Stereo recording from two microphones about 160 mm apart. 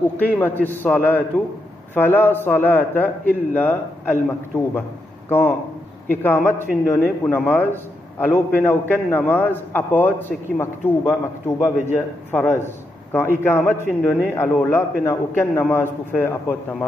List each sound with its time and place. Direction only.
0.2 s a man's voice: 10° left (ahead or behind)